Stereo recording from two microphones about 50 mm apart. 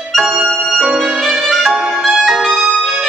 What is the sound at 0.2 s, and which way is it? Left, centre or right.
Music, centre.